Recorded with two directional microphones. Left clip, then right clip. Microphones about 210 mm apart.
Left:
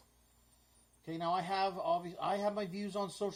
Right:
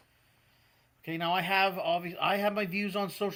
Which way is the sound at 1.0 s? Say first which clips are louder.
Right 5 dB; 30° right (ahead or behind).